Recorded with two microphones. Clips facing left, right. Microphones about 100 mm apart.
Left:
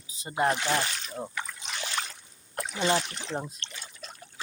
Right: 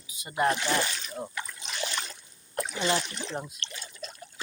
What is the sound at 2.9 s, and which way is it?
Speech, 30° left (ahead or behind).